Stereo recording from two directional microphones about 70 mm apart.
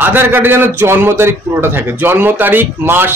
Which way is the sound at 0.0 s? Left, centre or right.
Right.